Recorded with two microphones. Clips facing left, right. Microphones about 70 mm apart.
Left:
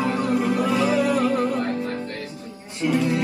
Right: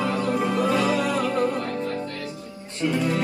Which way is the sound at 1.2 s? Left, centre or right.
Left.